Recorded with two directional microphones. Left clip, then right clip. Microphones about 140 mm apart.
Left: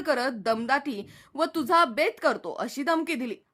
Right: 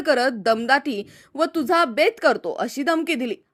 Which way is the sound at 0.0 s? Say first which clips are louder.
Right 7 dB; 20° right (ahead or behind).